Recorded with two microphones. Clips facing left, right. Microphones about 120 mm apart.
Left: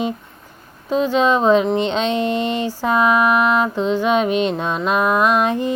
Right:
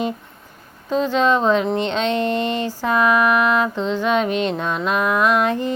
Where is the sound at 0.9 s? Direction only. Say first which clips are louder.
Left 1 dB; 15° left (ahead or behind).